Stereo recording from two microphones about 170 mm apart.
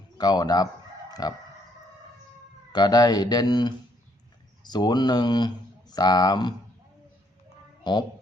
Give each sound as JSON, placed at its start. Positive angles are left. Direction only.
{"t": 0.2, "sound": "speech", "side_deg": 25}
{"t": 2.7, "sound": "speech", "side_deg": 25}
{"t": 7.9, "sound": "speech", "side_deg": 25}